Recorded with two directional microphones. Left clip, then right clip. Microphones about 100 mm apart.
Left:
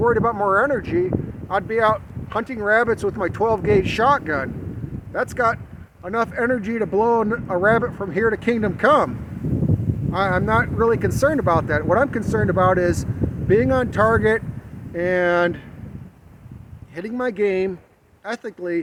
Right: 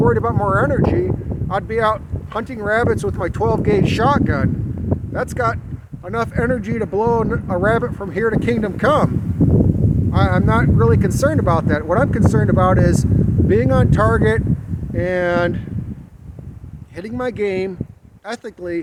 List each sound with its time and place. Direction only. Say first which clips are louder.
0.0 s speech: right 1 dB; 15° right (ahead or behind)
10.1 s speech: even; 20° right (ahead or behind)
17.0 s speech: even; 25° right (ahead or behind)